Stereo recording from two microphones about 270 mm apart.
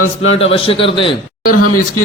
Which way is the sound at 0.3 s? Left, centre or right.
Left.